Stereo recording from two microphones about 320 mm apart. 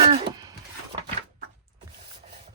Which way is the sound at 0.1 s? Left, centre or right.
Centre.